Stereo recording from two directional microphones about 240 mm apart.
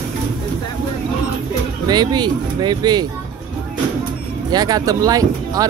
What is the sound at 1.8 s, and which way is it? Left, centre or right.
Speech, centre.